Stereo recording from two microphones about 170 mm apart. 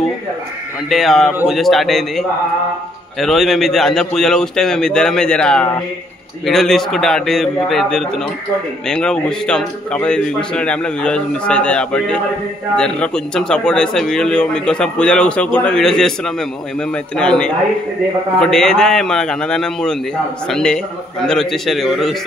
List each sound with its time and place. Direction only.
0.8 s a man's voice: centre (ahead or behind)